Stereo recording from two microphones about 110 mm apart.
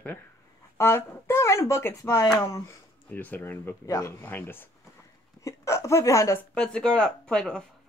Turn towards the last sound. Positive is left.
turn(degrees=5)  # may be behind; listen again after turning